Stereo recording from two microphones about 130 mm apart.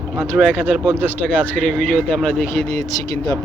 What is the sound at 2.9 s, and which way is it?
Speech, 25° left (ahead or behind).